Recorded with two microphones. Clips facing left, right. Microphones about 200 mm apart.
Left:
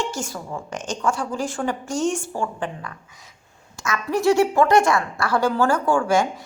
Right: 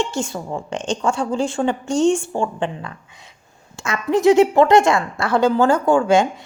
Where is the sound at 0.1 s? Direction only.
25° right (ahead or behind).